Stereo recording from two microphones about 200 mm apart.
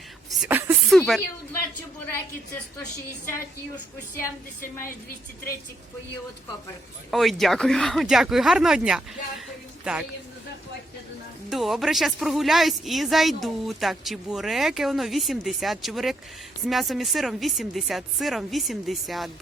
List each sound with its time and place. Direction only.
0.3 s a sound: 10° right (ahead or behind)
0.9 s speech: centre (ahead or behind)
4.6 s a woman's voice: 45° left (ahead or behind)
7.1 s speech: centre (ahead or behind)
11.4 s speech: centre (ahead or behind)